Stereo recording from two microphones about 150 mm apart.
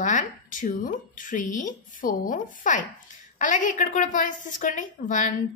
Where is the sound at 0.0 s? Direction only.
60° left (ahead or behind).